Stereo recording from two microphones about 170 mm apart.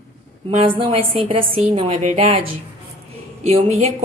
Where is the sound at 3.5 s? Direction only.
40° right (ahead or behind).